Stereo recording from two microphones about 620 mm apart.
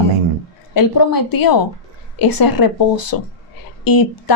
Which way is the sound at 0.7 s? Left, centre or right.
Left.